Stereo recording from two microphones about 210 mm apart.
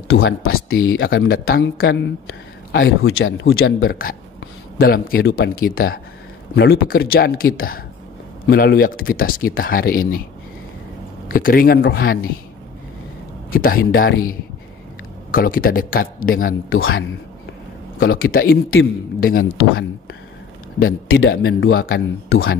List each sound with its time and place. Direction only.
0.1 s speech: 75° left (ahead or behind)
1.4 s speech: 45° left (ahead or behind)
1.9 s speech: 60° left (ahead or behind)
3.9 s speech: 45° left (ahead or behind)
11.2 s speech: 40° left (ahead or behind)
13.5 s speech: 45° left (ahead or behind)
15.3 s speech: 45° left (ahead or behind)
16.6 s speech: 70° left (ahead or behind)
17.9 s speech: 45° left (ahead or behind)
19.5 s speech: 75° left (ahead or behind)
20.8 s speech: 75° left (ahead or behind)
21.4 s speech: 45° left (ahead or behind)
22.3 s speech: 80° left